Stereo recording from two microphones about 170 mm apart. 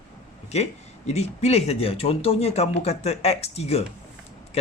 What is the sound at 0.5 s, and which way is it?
Speech, 40° left (ahead or behind).